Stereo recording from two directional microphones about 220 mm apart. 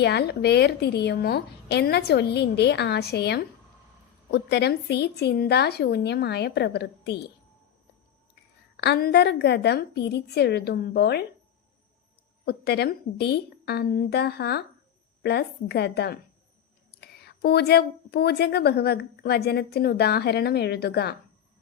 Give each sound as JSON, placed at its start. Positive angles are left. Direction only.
{"t": 0.0, "sound": "a woman's voice", "side_deg": 50}
{"t": 8.7, "sound": "a woman's voice", "side_deg": 50}
{"t": 12.5, "sound": "a woman's voice", "side_deg": 50}